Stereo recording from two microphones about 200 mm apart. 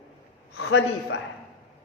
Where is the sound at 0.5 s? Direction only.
75° left (ahead or behind).